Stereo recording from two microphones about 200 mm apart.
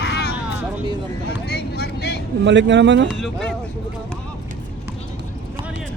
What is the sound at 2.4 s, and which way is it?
Speech, 65° right (ahead or behind).